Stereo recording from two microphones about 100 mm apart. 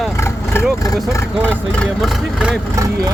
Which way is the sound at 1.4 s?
10° left (ahead or behind).